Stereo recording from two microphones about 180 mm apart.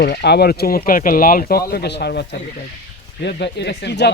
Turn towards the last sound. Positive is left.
turn(degrees=65)  # may be behind; listen again after turning